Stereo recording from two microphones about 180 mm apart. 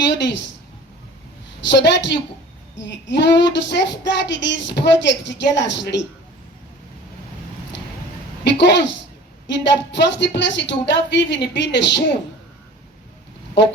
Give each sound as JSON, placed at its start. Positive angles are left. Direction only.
{"t": 0.1, "sound": "speech", "side_deg": 75}
{"t": 1.6, "sound": "a woman's voice", "side_deg": 75}
{"t": 8.4, "sound": "a woman's voice", "side_deg": 75}